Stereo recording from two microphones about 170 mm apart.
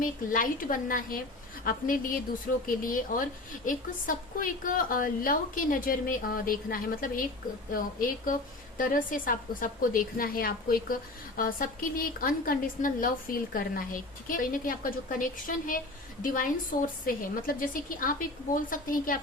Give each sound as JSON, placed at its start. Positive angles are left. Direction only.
{"t": 0.0, "sound": "a woman's voice", "side_deg": 55}